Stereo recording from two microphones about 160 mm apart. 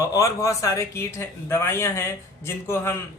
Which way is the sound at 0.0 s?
20° left (ahead or behind).